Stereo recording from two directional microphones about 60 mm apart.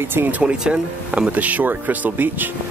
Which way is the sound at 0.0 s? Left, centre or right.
Right.